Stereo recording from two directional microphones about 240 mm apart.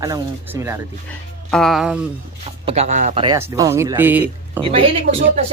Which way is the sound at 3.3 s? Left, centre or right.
Centre.